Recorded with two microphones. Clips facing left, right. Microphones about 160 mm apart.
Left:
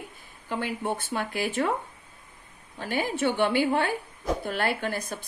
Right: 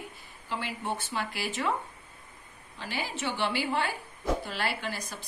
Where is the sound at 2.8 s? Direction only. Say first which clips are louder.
Left 8 dB; 50° left (ahead or behind).